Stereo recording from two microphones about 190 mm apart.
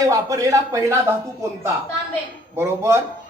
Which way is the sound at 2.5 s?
15° right (ahead or behind).